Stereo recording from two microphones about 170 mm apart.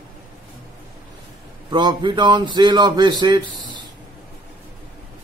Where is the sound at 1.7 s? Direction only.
25° right (ahead or behind).